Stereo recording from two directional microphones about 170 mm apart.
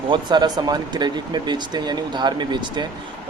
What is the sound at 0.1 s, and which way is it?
Speech, 25° right (ahead or behind).